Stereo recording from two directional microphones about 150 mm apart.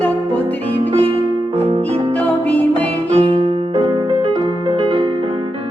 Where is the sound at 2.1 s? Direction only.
10° left (ahead or behind).